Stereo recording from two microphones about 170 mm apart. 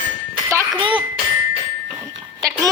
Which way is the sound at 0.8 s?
30° right (ahead or behind).